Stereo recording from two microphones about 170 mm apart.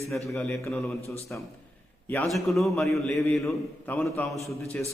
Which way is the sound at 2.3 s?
Centre (ahead or behind).